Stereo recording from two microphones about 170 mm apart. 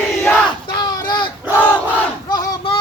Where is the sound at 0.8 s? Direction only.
25° left (ahead or behind).